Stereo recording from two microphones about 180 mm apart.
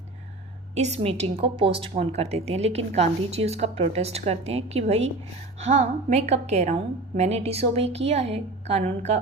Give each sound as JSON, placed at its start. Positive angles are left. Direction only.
{"t": 0.8, "sound": "a woman's voice", "side_deg": -35}